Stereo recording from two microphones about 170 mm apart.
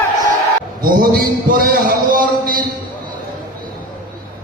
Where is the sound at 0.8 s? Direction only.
60° right (ahead or behind).